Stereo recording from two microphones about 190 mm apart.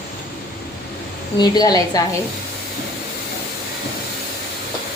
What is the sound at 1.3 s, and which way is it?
Speech, 20° left (ahead or behind).